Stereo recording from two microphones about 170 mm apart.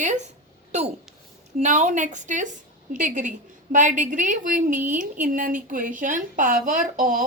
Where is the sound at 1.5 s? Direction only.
40° right (ahead or behind).